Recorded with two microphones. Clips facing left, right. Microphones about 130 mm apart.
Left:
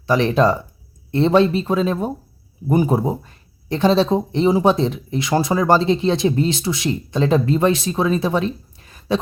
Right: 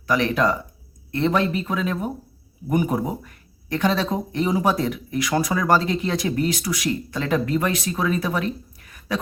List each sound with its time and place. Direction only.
0.1 s speech: 30° left (ahead or behind)